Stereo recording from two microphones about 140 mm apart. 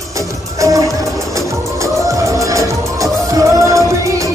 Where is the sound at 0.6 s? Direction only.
25° right (ahead or behind).